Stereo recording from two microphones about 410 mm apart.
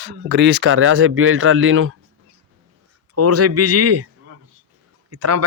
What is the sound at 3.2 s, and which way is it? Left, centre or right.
Speech, right.